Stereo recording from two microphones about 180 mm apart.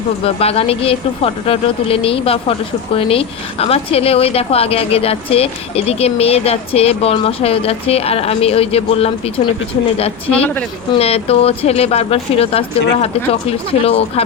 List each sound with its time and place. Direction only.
0.3 s speech: 35° left (ahead or behind)
10.2 s speech: 10° left (ahead or behind)
10.9 s speech: 35° left (ahead or behind)